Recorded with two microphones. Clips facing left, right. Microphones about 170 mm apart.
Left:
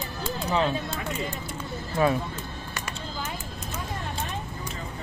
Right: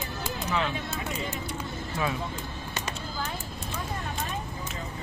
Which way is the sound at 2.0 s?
45° left (ahead or behind).